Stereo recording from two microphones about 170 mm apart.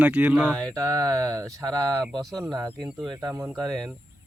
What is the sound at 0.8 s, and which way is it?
Speech, 20° right (ahead or behind).